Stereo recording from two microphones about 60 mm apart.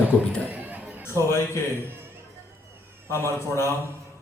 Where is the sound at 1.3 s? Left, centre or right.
Left.